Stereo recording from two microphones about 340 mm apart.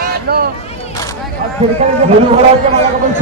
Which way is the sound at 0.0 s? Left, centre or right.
Right.